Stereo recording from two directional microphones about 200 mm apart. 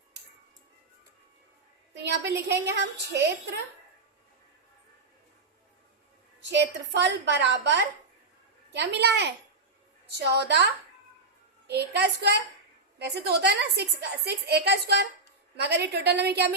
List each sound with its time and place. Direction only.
2.0 s a woman's voice: 60° right (ahead or behind)
6.4 s a woman's voice: 60° right (ahead or behind)
11.7 s a woman's voice: 55° right (ahead or behind)